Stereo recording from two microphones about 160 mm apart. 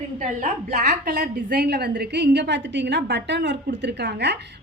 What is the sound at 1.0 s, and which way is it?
A woman's voice, 70° right (ahead or behind).